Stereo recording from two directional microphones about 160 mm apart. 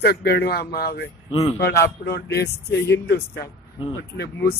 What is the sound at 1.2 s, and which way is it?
Speech, 35° left (ahead or behind).